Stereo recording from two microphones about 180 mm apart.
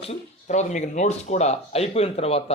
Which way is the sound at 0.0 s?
35° left (ahead or behind).